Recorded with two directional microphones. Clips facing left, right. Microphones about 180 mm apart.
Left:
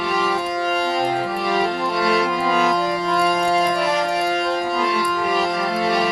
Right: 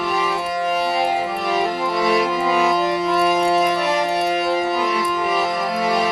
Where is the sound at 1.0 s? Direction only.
15° right (ahead or behind).